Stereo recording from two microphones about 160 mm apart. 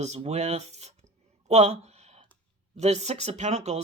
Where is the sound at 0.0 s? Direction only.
45° right (ahead or behind).